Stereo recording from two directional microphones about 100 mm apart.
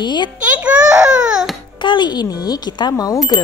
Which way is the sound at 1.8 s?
50° left (ahead or behind).